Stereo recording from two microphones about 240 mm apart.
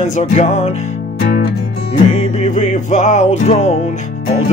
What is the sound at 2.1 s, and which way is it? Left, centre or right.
Music, left.